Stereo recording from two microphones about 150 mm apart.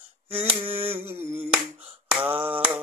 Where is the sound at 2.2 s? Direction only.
40° right (ahead or behind).